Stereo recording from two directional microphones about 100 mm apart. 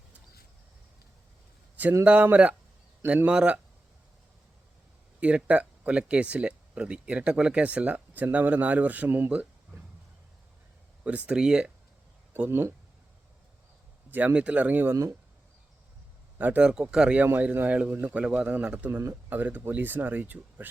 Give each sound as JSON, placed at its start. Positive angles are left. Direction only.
{"t": 1.7, "sound": "a sound", "side_deg": -15}
{"t": 2.0, "sound": "speech", "side_deg": -15}
{"t": 5.2, "sound": "speech", "side_deg": -10}
{"t": 11.0, "sound": "speech", "side_deg": -15}
{"t": 12.3, "sound": "speech", "side_deg": -20}
{"t": 14.1, "sound": "speech", "side_deg": -15}
{"t": 16.4, "sound": "speech", "side_deg": -15}
{"t": 18.9, "sound": "speech", "side_deg": -20}